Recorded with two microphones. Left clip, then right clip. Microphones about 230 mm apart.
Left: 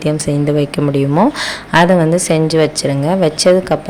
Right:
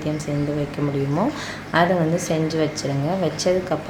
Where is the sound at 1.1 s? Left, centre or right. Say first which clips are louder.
Left 10 dB; left.